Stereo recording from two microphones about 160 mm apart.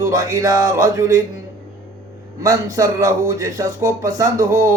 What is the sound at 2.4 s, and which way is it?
Speech, 20° right (ahead or behind).